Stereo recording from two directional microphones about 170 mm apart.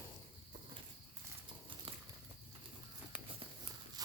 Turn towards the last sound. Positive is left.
turn(degrees=-20)  # may be behind; listen again after turning